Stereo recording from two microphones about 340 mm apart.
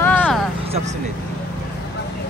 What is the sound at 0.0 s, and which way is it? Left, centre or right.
Vehicle, centre.